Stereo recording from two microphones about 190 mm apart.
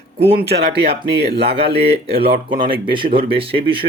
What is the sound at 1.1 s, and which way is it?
Speech, 55° right (ahead or behind).